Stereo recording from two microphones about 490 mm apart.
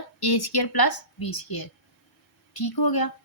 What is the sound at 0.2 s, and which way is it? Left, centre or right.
A woman's voice, left.